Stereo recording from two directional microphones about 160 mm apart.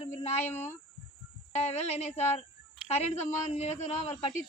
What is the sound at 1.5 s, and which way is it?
Speech, 45° left (ahead or behind).